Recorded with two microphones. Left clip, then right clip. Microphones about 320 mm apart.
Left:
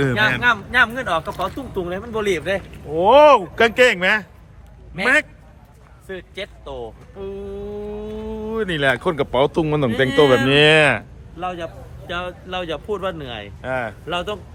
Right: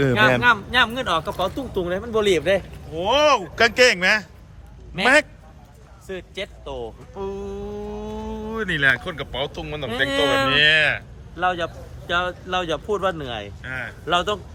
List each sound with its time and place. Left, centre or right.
0.0 s speech: centre
2.2 s speech: centre
2.9 s speech: centre
11.3 s speech: centre
13.6 s speech: centre
14.1 s speech: centre